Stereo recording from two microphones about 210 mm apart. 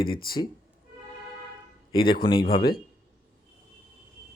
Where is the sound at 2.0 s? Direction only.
45° left (ahead or behind).